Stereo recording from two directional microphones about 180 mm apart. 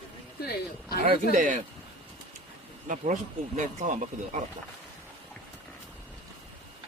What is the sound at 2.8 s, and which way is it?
Speech, 45° right (ahead or behind).